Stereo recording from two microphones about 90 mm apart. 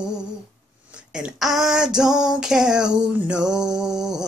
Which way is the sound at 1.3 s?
Centre (ahead or behind).